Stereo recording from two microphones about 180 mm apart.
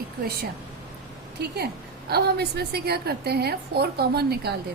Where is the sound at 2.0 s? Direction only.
60° right (ahead or behind).